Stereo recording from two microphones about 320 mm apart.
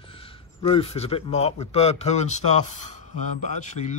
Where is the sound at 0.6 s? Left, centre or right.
Centre.